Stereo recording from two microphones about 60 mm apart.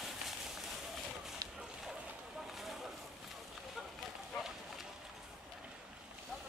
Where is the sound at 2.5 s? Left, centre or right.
Centre.